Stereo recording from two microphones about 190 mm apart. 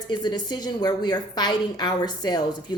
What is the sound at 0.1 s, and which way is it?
Speech, 20° left (ahead or behind).